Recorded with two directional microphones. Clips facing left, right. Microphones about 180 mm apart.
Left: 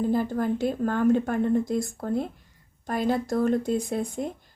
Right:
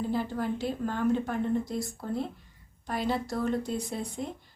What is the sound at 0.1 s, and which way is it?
Speech, 50° left (ahead or behind).